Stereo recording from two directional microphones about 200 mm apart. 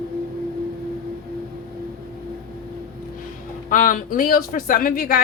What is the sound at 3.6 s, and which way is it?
Speech, 40° left (ahead or behind).